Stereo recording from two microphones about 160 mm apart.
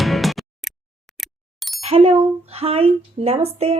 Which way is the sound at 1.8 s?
40° right (ahead or behind).